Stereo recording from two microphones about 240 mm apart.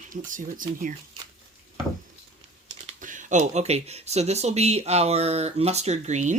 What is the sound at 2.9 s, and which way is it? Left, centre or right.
Speech, right.